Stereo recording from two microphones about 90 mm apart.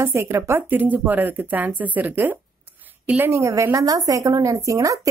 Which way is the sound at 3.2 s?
30° right (ahead or behind).